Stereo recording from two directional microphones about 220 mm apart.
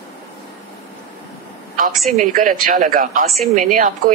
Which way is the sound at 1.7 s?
40° right (ahead or behind).